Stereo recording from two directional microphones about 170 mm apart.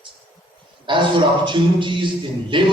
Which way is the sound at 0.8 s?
30° right (ahead or behind).